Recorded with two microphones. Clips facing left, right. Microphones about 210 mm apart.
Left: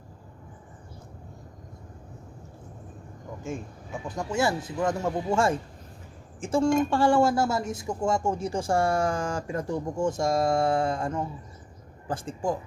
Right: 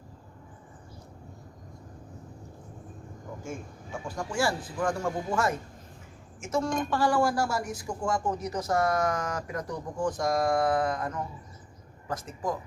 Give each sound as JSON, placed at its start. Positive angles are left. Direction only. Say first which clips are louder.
{"t": 4.1, "sound": "a woman's voice", "louder": "left 3 dB", "side_deg": 20}